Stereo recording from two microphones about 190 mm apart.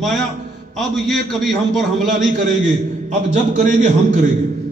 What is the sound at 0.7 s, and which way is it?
A man's voice, centre (ahead or behind).